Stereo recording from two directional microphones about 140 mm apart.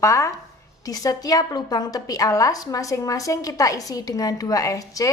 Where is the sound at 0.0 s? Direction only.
20° left (ahead or behind).